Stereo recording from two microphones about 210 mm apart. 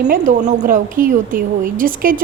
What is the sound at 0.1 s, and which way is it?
A woman's voice, 35° right (ahead or behind).